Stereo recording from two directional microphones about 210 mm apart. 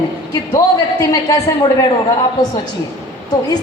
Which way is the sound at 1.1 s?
15° left (ahead or behind).